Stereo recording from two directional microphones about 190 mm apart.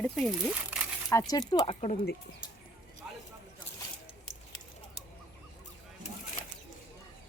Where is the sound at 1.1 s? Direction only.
20° left (ahead or behind).